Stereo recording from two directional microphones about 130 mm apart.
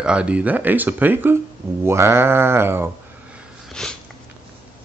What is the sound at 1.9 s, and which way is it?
Sheep, 20° right (ahead or behind).